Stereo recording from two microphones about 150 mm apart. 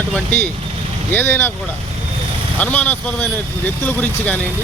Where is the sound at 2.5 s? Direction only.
10° left (ahead or behind).